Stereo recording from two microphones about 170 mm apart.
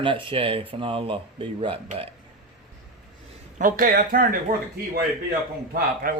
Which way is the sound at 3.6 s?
55° right (ahead or behind).